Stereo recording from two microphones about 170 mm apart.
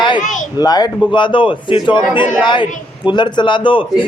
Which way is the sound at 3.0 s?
25° left (ahead or behind).